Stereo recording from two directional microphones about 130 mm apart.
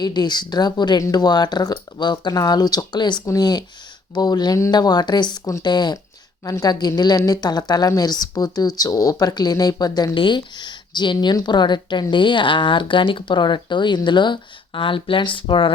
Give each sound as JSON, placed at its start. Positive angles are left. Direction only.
{"t": 0.0, "sound": "speech", "side_deg": 35}